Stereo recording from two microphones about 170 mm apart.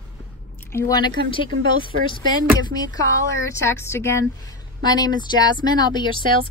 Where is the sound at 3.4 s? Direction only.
15° left (ahead or behind).